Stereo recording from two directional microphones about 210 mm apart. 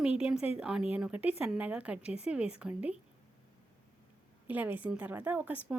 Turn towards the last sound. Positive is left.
turn(degrees=-10)  # may be behind; listen again after turning